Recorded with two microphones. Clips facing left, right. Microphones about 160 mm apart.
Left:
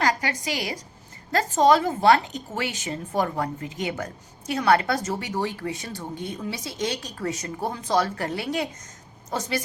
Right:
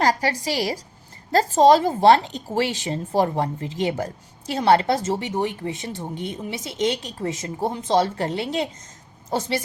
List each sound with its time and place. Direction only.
0.0 s a woman's voice: 35° right (ahead or behind)